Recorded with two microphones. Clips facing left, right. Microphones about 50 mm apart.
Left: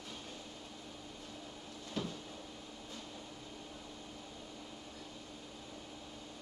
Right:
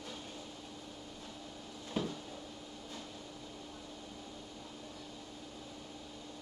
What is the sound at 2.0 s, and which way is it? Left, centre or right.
Cupboard open or close, right.